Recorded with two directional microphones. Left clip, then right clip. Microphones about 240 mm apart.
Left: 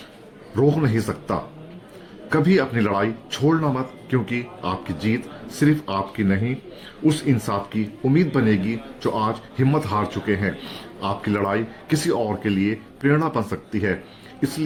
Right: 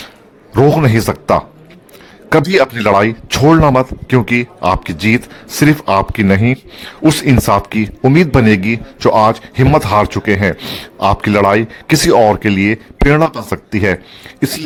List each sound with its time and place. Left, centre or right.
0.5 s a man's voice: right
2.3 s a man's voice: right